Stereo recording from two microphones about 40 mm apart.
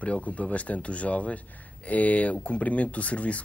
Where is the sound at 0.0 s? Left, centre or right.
Left.